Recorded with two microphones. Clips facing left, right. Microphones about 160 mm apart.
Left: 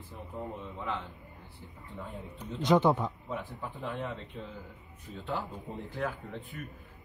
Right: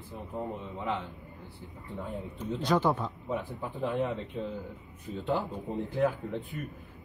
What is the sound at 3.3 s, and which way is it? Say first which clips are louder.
Speech: right 4 dB; 20° right (ahead or behind).